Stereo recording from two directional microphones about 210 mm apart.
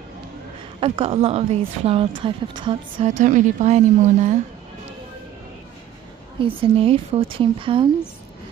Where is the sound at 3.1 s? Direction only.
35° right (ahead or behind).